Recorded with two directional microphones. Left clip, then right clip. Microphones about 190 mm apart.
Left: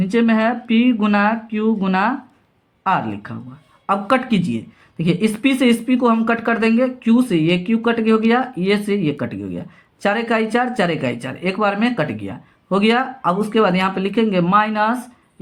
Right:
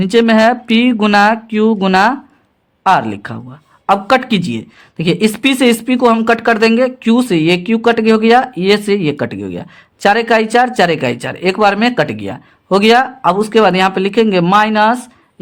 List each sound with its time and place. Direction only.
0.0 s speech: 65° right (ahead or behind)